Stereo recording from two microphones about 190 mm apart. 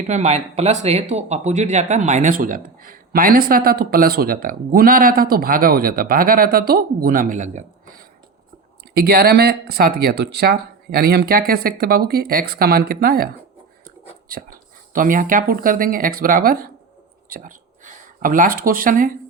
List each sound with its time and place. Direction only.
0.1 s speech: 35° right (ahead or behind)
9.0 s speech: 55° right (ahead or behind)